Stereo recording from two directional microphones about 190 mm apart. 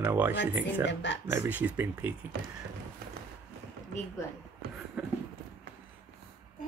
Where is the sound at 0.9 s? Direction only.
70° left (ahead or behind).